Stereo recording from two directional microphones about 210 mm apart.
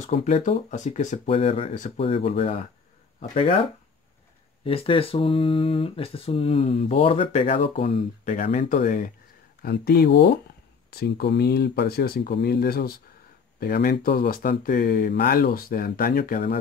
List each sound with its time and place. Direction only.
0.0 s speech: 35° left (ahead or behind)
4.6 s speech: 25° left (ahead or behind); by 16.5 s 45° left (ahead or behind)